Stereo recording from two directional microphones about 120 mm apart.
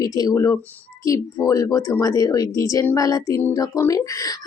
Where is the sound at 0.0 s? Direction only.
30° left (ahead or behind).